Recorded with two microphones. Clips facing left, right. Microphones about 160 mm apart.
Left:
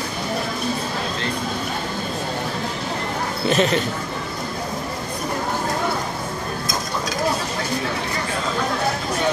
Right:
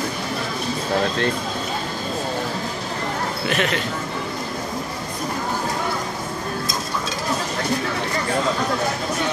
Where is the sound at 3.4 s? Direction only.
30° left (ahead or behind).